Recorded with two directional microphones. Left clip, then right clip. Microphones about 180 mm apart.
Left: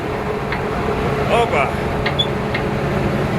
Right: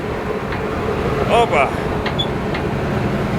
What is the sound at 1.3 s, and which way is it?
Speech, 25° right (ahead or behind).